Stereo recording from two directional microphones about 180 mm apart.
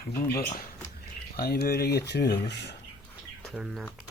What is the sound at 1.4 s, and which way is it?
Speech, 60° left (ahead or behind).